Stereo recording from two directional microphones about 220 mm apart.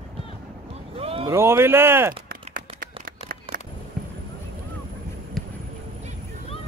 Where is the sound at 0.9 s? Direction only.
25° right (ahead or behind).